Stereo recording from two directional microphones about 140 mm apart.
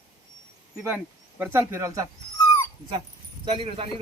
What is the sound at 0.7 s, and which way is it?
Speech, 10° right (ahead or behind).